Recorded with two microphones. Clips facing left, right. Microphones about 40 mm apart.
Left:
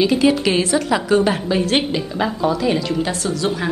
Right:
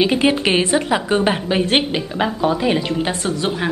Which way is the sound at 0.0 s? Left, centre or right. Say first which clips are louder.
Left 1 dB; right.